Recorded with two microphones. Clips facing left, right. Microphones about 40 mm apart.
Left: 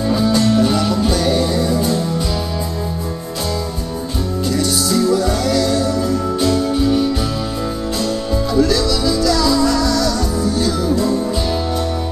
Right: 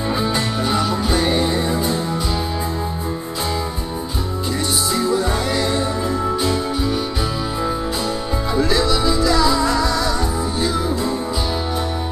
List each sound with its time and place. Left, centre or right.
0.1 s music: right
4.5 s music: right
6.7 s music: centre
8.5 s music: right